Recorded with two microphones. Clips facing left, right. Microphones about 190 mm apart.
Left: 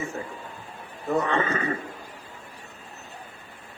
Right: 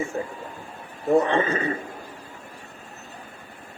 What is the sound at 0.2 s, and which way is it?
A man's voice, 30° right (ahead or behind).